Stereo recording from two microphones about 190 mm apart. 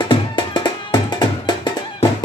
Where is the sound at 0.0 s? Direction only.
25° left (ahead or behind).